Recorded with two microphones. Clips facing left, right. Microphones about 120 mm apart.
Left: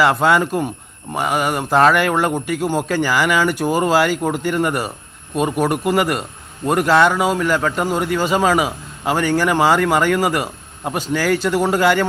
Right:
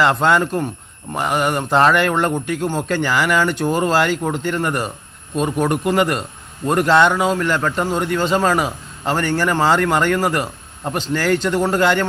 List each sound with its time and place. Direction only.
0.0 s speech: 5° left (ahead or behind)